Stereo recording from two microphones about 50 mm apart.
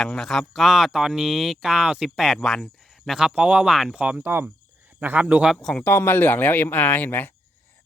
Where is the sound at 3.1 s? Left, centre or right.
Centre.